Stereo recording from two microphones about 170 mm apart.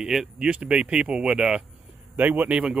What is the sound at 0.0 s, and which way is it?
Speech, 5° right (ahead or behind).